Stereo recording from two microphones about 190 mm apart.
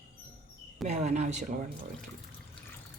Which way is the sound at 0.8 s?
40° right (ahead or behind).